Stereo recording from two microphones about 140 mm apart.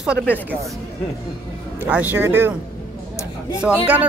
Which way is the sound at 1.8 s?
10° right (ahead or behind).